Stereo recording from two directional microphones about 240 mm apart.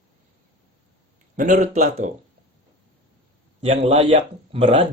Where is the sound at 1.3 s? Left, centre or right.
Right.